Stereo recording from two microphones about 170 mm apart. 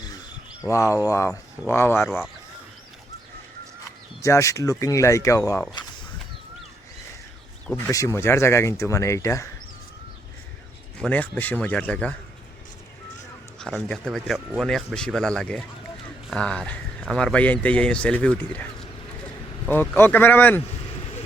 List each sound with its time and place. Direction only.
0.7 s speech: 15° left (ahead or behind)
4.2 s speech: 20° left (ahead or behind)
7.9 s speech: 15° left (ahead or behind)
11.0 s speech: 10° left (ahead or behind)
13.6 s a man's voice: centre (ahead or behind)